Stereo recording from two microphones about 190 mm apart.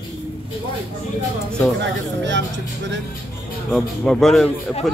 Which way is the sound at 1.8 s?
70° right (ahead or behind).